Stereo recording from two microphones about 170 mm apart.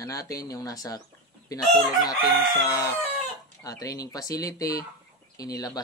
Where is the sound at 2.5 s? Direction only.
20° left (ahead or behind).